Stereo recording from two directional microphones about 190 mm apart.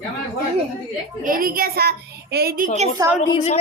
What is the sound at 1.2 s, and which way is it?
A woman's voice, 50° right (ahead or behind).